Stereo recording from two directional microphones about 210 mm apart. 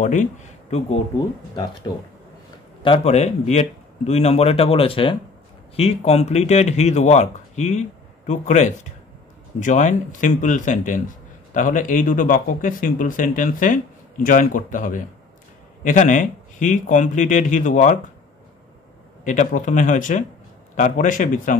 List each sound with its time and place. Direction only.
0.0 s speech: 35° left (ahead or behind)
2.8 s speech: 30° left (ahead or behind)
19.2 s speech: 35° left (ahead or behind)